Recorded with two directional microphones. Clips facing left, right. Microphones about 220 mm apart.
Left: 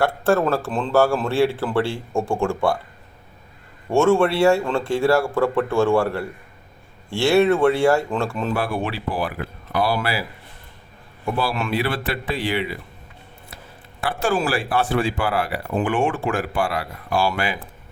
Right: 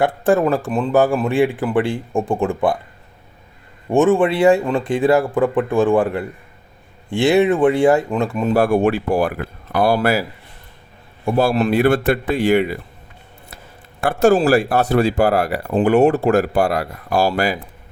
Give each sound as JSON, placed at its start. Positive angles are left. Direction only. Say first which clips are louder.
{"t": 0.0, "sound": "speech", "louder": "right 3 dB", "side_deg": -15}
{"t": 3.8, "sound": "speech", "louder": "right 2 dB", "side_deg": -15}
{"t": 8.5, "sound": "speech", "louder": "right 9 dB", "side_deg": -45}
{"t": 11.3, "sound": "speech", "louder": "right 8 dB", "side_deg": -40}
{"t": 14.0, "sound": "speech", "louder": "right 8 dB", "side_deg": -45}